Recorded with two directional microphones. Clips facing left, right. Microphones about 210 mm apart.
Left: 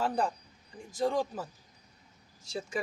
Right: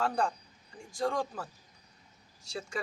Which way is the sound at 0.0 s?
5° left (ahead or behind).